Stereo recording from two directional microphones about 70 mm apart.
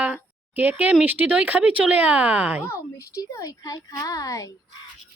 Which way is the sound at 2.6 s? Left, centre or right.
Left.